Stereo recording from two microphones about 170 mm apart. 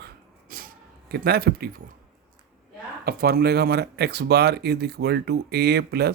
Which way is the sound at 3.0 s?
65° right (ahead or behind).